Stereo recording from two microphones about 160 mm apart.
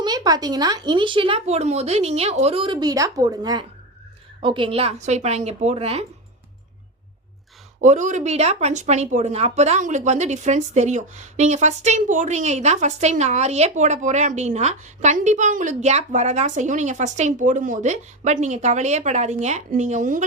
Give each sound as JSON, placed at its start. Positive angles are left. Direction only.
{"t": 0.0, "sound": "speech", "side_deg": -25}
{"t": 7.8, "sound": "speech", "side_deg": -50}